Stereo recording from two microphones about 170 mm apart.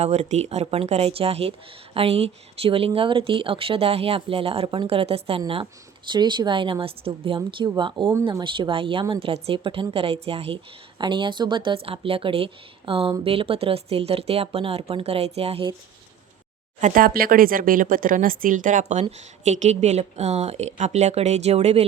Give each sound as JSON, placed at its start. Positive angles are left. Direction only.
{"t": 0.0, "sound": "a woman's voice", "side_deg": -40}
{"t": 16.8, "sound": "speech", "side_deg": -55}